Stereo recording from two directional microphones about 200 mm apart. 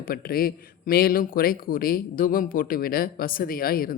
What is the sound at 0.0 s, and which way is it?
Speech, 50° left (ahead or behind).